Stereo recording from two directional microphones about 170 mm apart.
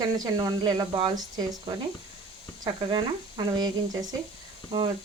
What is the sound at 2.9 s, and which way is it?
Speech, 25° right (ahead or behind).